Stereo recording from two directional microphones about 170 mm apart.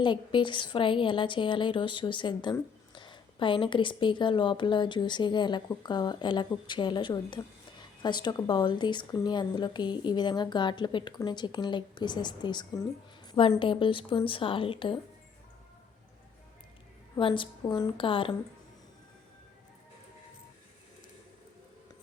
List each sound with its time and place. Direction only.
0.0 s a woman's voice: 30° left (ahead or behind)
17.2 s a woman's voice: 30° left (ahead or behind)